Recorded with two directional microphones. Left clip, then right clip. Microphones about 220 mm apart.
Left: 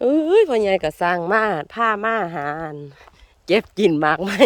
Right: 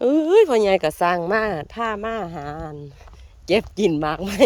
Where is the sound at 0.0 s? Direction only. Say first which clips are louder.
Even; 5° left (ahead or behind).